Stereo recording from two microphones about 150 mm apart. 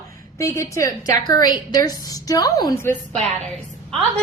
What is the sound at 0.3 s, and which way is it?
A woman's voice, 20° left (ahead or behind).